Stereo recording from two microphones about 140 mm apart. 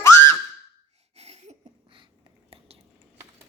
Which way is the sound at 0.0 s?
20° left (ahead or behind).